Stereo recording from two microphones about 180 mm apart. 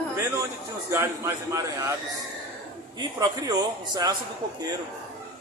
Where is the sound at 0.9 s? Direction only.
15° right (ahead or behind).